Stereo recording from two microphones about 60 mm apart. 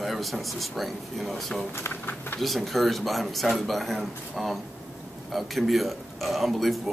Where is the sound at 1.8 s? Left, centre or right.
Left.